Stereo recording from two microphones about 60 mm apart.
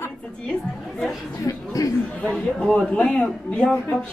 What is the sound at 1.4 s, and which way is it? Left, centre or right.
Speech, left.